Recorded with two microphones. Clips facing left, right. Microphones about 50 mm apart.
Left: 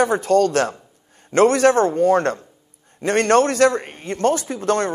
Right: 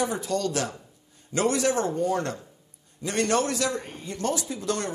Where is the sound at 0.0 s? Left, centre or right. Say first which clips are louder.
Left 11 dB; left.